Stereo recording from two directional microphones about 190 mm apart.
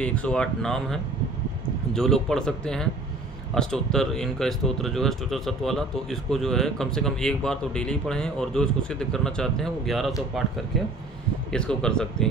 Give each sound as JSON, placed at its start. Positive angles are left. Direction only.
{"t": 0.0, "sound": "speech", "side_deg": 5}
{"t": 11.5, "sound": "speech", "side_deg": 5}